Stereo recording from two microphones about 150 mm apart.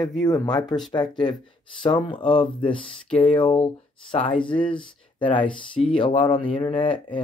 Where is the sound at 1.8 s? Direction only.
35° left (ahead or behind).